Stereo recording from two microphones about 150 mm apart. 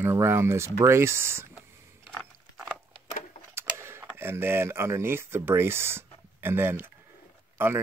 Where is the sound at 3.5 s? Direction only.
15° right (ahead or behind).